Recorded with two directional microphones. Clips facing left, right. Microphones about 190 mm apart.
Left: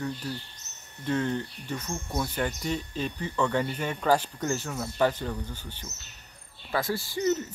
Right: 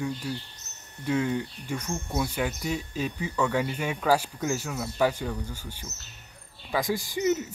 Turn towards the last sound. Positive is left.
turn(degrees=-15)  # may be behind; listen again after turning